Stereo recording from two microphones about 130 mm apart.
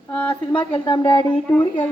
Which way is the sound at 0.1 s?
10° left (ahead or behind).